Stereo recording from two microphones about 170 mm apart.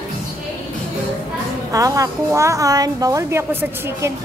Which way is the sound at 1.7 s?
20° right (ahead or behind).